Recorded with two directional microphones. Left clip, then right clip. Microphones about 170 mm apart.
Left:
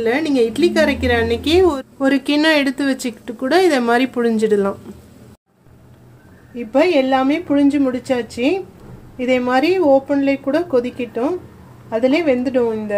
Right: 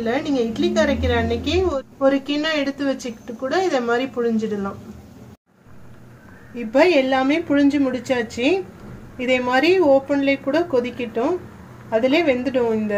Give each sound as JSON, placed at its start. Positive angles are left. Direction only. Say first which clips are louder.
{"t": 0.0, "sound": "a woman's voice", "louder": "left 5 dB", "side_deg": 55}
{"t": 6.5, "sound": "a woman's voice", "louder": "left 1 dB", "side_deg": 10}